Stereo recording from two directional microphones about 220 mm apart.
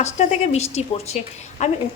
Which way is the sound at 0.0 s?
30° left (ahead or behind).